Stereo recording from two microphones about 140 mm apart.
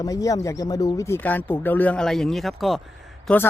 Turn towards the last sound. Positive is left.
turn(degrees=0)  # may be behind; listen again after turning